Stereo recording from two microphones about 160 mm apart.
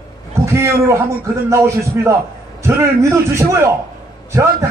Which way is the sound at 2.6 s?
15° right (ahead or behind).